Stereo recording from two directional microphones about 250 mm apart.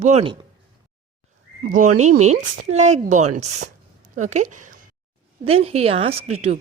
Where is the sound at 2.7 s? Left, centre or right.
Right.